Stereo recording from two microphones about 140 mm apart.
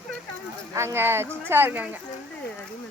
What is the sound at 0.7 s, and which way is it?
Speech, 20° right (ahead or behind).